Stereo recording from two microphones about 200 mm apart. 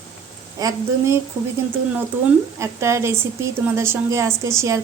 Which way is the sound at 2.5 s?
15° right (ahead or behind).